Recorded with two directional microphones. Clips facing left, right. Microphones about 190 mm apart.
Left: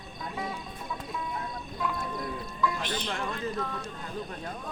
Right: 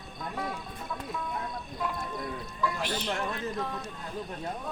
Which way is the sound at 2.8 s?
10° right (ahead or behind).